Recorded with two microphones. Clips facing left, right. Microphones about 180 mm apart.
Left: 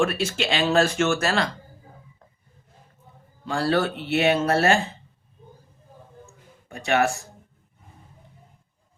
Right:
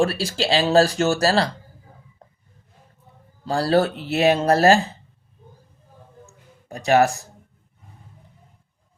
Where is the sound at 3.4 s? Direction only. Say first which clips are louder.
Right 4 dB; 35° right (ahead or behind).